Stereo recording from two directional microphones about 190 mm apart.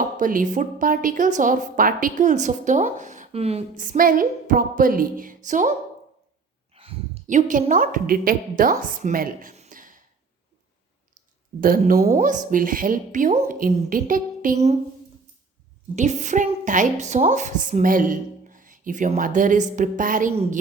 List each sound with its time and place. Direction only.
0.2 s a woman's voice: 45° right (ahead or behind)
6.7 s a woman's voice: 30° right (ahead or behind)
11.6 s a woman's voice: 45° right (ahead or behind)
16.0 s a woman's voice: 40° right (ahead or behind)
20.3 s a woman's voice: 35° right (ahead or behind)